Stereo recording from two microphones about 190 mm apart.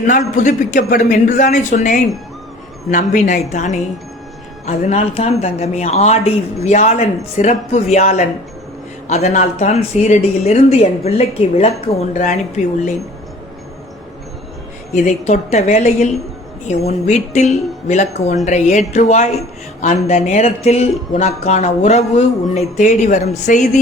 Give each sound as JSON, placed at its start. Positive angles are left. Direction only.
{"t": 0.1, "sound": "speech", "side_deg": 40}
{"t": 15.0, "sound": "speech", "side_deg": 35}